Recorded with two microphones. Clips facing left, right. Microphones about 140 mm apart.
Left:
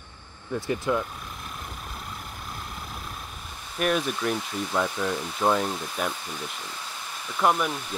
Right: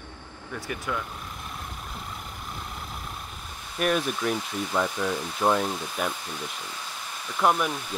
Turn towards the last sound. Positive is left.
turn(degrees=0)  # may be behind; listen again after turning